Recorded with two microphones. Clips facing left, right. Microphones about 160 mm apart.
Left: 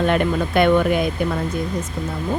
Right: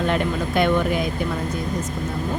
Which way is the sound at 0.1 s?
60° left (ahead or behind).